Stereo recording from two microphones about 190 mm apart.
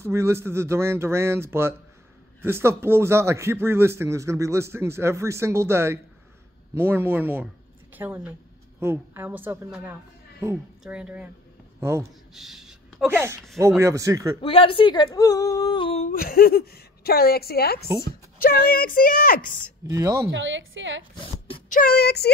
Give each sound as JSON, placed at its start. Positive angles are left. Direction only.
{"t": 0.0, "sound": "a woman's voice", "side_deg": -15}
{"t": 12.4, "sound": "a sound", "side_deg": 0}
{"t": 13.1, "sound": "speech", "side_deg": -15}
{"t": 14.4, "sound": "speech", "side_deg": 30}
{"t": 16.1, "sound": "a woman's voice", "side_deg": 50}
{"t": 19.9, "sound": "speech", "side_deg": -15}
{"t": 20.2, "sound": "a woman's voice", "side_deg": -75}
{"t": 21.2, "sound": "a sound", "side_deg": 25}
{"t": 21.6, "sound": "a woman's voice", "side_deg": 45}